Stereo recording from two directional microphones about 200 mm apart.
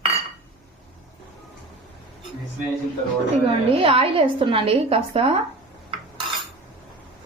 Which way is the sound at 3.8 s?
30° right (ahead or behind).